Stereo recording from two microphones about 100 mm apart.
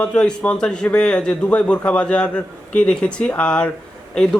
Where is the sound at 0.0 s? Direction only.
10° left (ahead or behind).